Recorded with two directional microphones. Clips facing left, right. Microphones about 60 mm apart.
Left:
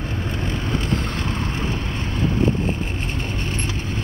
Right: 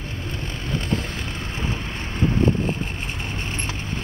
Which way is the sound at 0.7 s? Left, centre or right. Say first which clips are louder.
Even; centre.